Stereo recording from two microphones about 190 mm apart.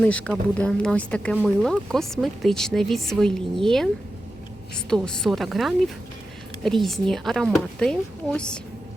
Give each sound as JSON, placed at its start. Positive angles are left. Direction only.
{"t": 0.0, "sound": "speech", "side_deg": 5}
{"t": 4.9, "sound": "speech", "side_deg": 5}